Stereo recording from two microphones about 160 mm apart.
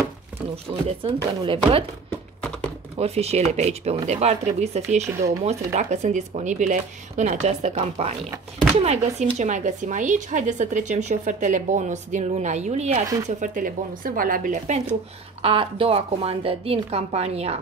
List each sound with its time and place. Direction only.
0.8 s a woman's voice: 35° right (ahead or behind)
2.0 s a sound: 5° left (ahead or behind)
3.0 s speech: 40° right (ahead or behind)
13.4 s speech: 55° right (ahead or behind)
15.4 s a woman's voice: 35° right (ahead or behind)